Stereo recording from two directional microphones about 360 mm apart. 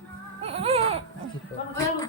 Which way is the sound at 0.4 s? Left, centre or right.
Centre.